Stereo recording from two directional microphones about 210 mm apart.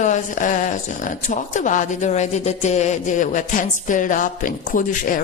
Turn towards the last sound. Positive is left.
turn(degrees=40)  # may be behind; listen again after turning